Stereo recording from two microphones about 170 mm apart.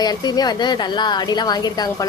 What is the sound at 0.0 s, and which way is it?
A woman's voice, 25° left (ahead or behind).